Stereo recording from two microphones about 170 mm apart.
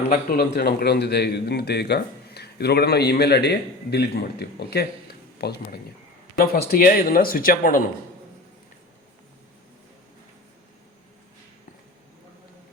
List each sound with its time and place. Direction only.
0.1 s a man's voice: 65° left (ahead or behind)
6.3 s speech: 60° left (ahead or behind)